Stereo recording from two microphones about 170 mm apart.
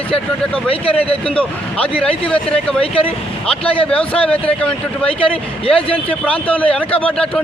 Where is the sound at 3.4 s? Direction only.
5° left (ahead or behind).